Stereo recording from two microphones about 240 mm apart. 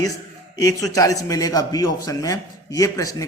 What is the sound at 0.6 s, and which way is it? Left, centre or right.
A man's voice, centre.